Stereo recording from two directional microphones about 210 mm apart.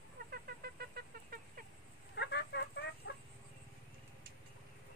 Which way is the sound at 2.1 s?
55° left (ahead or behind).